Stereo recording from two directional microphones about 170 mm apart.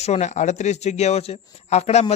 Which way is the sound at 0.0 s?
40° left (ahead or behind).